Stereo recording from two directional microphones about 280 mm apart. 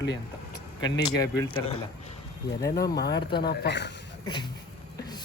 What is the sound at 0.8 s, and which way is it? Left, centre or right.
Speech, centre.